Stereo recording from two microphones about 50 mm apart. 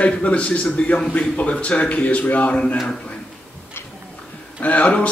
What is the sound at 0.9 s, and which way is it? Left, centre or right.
Speech, centre.